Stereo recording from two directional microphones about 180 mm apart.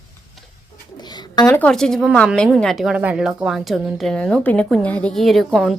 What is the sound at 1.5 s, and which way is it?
A woman's voice, 5° left (ahead or behind).